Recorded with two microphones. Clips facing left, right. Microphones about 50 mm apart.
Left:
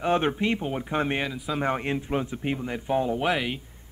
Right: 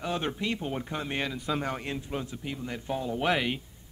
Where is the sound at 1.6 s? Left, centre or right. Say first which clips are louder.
Left 6 dB; left.